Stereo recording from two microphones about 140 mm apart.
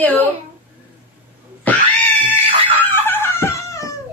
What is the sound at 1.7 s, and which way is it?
Cat, 10° left (ahead or behind).